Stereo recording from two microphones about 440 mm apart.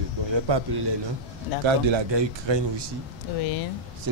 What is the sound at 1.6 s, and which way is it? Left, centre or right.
Speech, right.